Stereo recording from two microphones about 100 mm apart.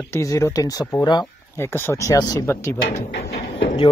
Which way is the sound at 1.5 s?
25° left (ahead or behind).